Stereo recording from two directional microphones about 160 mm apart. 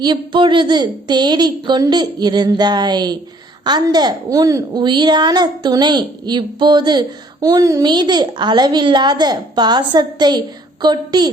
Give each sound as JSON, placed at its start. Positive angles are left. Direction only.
{"t": 0.0, "sound": "a child's voice", "side_deg": -30}